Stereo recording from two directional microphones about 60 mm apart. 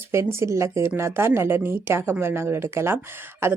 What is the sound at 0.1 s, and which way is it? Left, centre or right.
A woman's voice, right.